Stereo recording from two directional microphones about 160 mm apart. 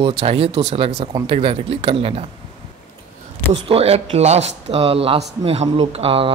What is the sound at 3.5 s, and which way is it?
Speech, 35° right (ahead or behind).